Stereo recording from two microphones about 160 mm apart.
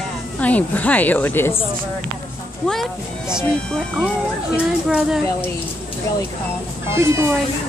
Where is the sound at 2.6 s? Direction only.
Centre (ahead or behind).